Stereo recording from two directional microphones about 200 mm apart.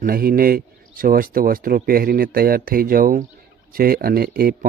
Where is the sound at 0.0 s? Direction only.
50° right (ahead or behind).